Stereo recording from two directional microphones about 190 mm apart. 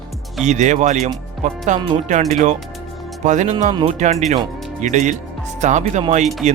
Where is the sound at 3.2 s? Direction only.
40° right (ahead or behind).